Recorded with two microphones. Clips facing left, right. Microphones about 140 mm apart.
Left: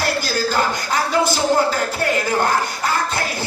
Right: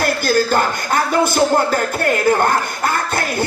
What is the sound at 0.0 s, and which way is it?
Speech, 50° right (ahead or behind).